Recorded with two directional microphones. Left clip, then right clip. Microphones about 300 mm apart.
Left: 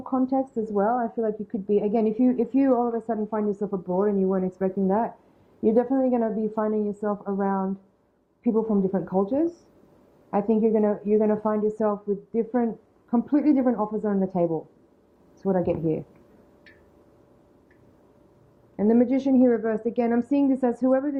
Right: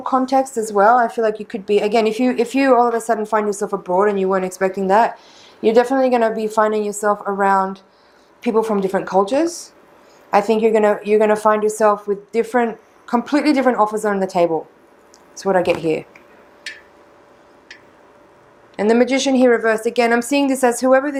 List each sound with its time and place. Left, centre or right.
0.0 s a woman's voice: centre
18.8 s speech: centre